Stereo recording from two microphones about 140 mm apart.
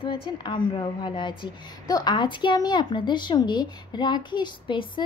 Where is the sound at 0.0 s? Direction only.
35° left (ahead or behind).